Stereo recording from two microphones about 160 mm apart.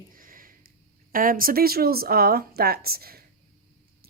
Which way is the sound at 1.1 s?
60° right (ahead or behind).